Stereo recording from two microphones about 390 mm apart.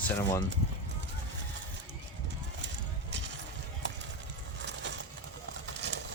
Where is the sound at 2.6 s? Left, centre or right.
Right.